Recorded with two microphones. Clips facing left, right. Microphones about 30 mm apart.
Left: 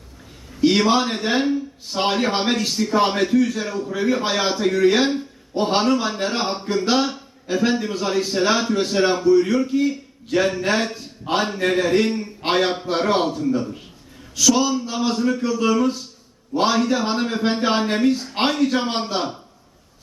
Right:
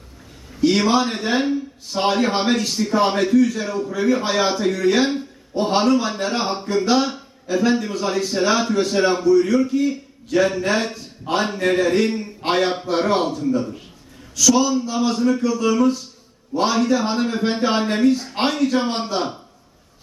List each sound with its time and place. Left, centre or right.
0.6 s a man's voice: left
1.0 s a man's voice: centre
3.9 s a man's voice: centre
4.8 s a man's voice: centre